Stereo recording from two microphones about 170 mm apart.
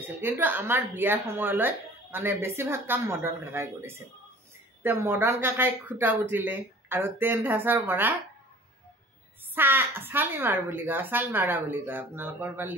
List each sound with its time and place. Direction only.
0.2 s speech: 10° right (ahead or behind)
9.6 s speech: 15° right (ahead or behind)